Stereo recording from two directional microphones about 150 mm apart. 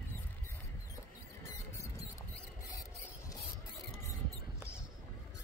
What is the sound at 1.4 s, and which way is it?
Mouse, 20° left (ahead or behind).